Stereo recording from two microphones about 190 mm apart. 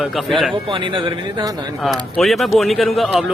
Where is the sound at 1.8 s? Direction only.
Centre (ahead or behind).